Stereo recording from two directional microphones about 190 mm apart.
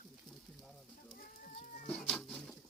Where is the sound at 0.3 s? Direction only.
20° left (ahead or behind).